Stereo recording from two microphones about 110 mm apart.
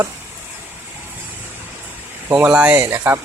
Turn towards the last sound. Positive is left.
turn(degrees=-20)  # may be behind; listen again after turning